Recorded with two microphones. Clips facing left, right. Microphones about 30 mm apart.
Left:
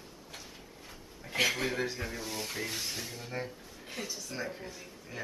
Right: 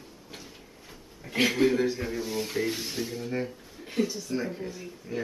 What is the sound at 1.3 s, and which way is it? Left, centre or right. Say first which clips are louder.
Speech: right 6 dB; centre.